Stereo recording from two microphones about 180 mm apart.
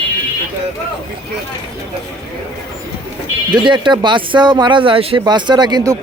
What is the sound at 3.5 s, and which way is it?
Speech, 25° right (ahead or behind).